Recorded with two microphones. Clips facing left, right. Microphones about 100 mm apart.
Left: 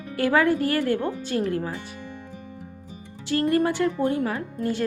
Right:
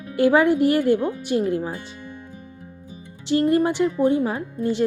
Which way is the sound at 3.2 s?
20° right (ahead or behind).